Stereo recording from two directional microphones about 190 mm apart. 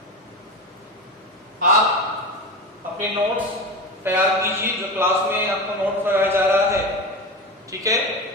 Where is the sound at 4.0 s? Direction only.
10° right (ahead or behind).